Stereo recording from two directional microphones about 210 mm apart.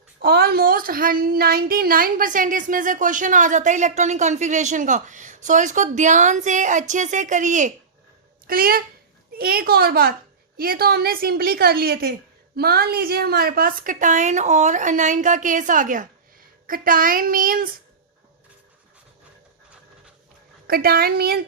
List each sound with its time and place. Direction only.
0.2 s a woman's voice: 50° right (ahead or behind)
20.7 s a woman's voice: 45° right (ahead or behind)